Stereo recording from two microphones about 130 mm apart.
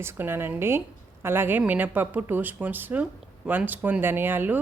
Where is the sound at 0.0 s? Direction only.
20° right (ahead or behind).